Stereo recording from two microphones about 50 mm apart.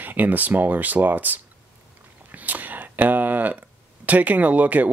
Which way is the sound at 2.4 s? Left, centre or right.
Right.